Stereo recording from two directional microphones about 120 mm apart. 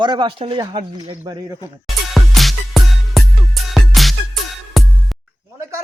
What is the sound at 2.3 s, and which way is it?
Music, centre (ahead or behind).